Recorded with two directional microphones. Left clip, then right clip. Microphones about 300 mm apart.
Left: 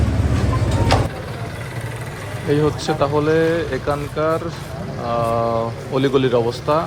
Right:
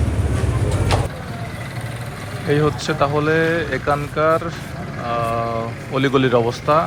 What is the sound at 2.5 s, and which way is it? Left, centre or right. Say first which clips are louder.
Speech: even; centre.